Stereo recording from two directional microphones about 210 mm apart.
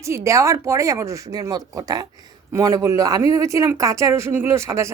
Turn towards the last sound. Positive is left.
turn(degrees=-15)  # may be behind; listen again after turning